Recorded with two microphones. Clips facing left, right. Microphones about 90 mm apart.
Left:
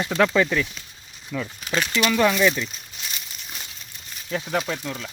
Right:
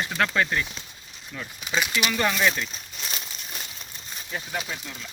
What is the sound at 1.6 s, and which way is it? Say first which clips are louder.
Speech: left 1 dB; 10° right (ahead or behind).